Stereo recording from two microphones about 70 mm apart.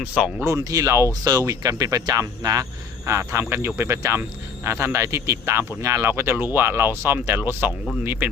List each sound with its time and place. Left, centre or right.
0.4 s speech: right
3.1 s a man's voice: right